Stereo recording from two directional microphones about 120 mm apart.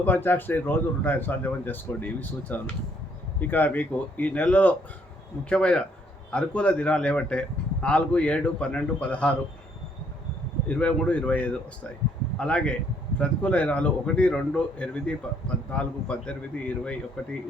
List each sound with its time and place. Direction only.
0.0 s speech: 15° left (ahead or behind)
10.7 s speech: 10° left (ahead or behind)